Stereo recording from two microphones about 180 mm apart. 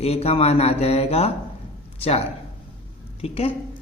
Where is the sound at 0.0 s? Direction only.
35° left (ahead or behind).